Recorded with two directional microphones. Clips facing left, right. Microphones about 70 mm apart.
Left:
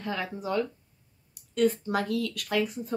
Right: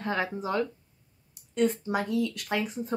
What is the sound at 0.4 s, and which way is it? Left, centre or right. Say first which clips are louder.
Speech: even; right.